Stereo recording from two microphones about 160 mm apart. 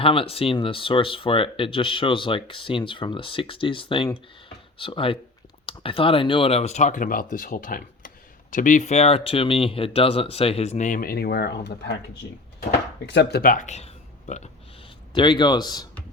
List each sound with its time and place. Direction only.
0.0 s speech: 35° left (ahead or behind); by 11.9 s 90° left
13.1 s speech: 90° left; by 14.5 s 45° left (ahead or behind)
15.1 s a man's voice: 30° left (ahead or behind)